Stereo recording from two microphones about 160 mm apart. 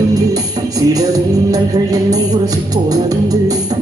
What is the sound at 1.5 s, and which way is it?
Music, 20° right (ahead or behind).